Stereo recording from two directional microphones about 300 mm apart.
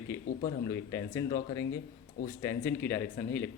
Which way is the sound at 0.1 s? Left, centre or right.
Centre.